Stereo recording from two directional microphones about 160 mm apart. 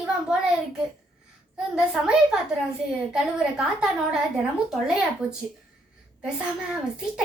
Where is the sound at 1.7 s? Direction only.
5° right (ahead or behind).